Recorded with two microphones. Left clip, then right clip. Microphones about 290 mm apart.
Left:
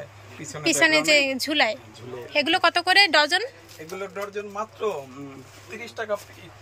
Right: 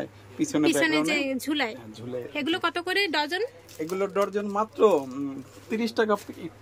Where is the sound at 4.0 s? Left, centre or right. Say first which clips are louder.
Right 6 dB; right.